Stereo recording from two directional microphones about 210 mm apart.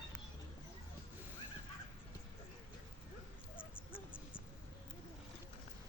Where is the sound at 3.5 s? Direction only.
25° left (ahead or behind).